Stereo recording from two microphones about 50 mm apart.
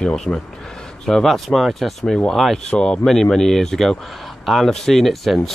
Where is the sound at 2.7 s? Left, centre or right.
Centre.